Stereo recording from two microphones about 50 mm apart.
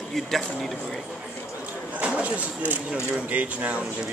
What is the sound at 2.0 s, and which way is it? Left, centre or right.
Speech, right.